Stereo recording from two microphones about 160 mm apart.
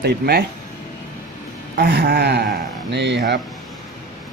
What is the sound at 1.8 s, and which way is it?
Speech, 90° right.